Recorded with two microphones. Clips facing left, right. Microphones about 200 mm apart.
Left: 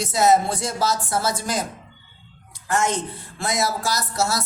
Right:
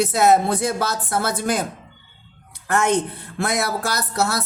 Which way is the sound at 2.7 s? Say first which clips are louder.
Right 3 dB; 60° right (ahead or behind).